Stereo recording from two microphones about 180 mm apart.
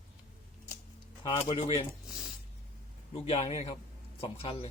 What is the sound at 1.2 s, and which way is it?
Speech, 25° left (ahead or behind).